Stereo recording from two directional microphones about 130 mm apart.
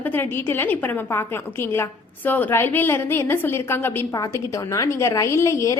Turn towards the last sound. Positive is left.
turn(degrees=25)  # may be behind; listen again after turning